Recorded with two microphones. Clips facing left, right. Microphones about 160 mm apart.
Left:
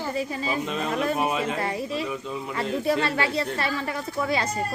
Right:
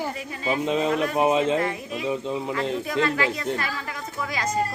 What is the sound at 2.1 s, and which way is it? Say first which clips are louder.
Speech: right 5 dB; 25° right (ahead or behind).